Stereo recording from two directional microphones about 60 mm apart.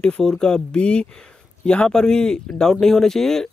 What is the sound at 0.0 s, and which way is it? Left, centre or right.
Speech, centre.